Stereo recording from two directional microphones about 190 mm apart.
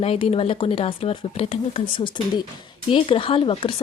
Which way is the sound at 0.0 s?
30° left (ahead or behind).